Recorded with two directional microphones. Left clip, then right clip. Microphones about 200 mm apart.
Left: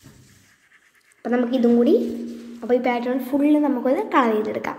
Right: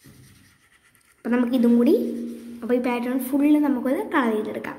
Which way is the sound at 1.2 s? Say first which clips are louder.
Left 2 dB; 30° right (ahead or behind).